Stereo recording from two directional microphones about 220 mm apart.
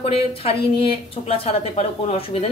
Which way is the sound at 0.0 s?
25° left (ahead or behind).